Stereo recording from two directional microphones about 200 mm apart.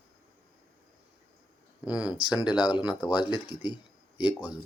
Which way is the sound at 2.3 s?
5° right (ahead or behind).